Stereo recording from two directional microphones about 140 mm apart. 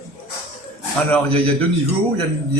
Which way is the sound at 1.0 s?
10° left (ahead or behind).